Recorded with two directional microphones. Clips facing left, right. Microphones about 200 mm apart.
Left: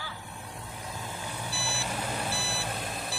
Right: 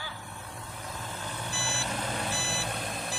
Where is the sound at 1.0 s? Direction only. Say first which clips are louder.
Even; 10° left (ahead or behind).